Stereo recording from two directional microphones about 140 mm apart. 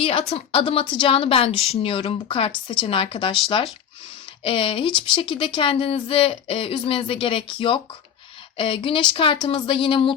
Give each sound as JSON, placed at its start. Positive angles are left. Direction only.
{"t": 0.0, "sound": "speech", "side_deg": 40}